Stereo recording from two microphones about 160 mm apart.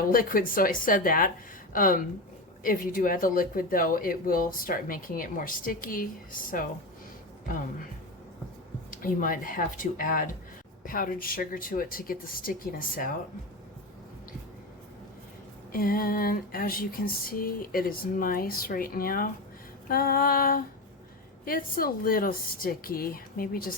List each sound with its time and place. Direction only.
0.1 s speech: 60° left (ahead or behind)
8.9 s speech: 60° left (ahead or behind)
15.7 s speech: 65° left (ahead or behind)